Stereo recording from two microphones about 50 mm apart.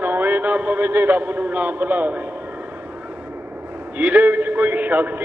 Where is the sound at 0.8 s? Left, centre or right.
Right.